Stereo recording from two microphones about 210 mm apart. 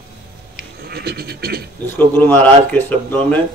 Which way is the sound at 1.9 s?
10° left (ahead or behind).